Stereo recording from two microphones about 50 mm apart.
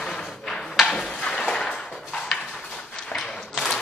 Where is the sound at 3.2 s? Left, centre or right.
Centre.